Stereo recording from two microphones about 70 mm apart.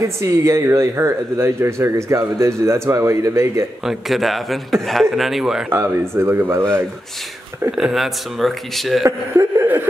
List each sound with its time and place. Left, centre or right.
0.2 s a man's voice: right
3.8 s speech: centre
5.7 s speech: right
7.7 s speech: centre
9.0 s a man's voice: right